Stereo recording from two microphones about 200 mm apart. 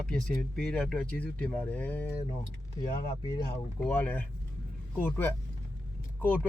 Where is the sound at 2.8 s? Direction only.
20° left (ahead or behind).